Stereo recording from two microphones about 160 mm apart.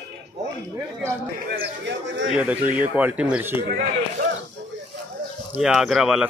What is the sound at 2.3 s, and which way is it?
A man's voice, 10° right (ahead or behind).